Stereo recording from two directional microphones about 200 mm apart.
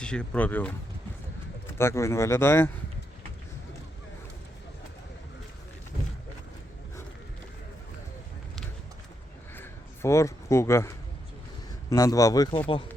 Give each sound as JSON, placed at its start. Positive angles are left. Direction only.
{"t": 0.0, "sound": "a man's voice", "side_deg": 5}
{"t": 1.8, "sound": "a man's voice", "side_deg": 15}
{"t": 9.6, "sound": "a sound", "side_deg": 15}
{"t": 11.9, "sound": "a man's voice", "side_deg": 15}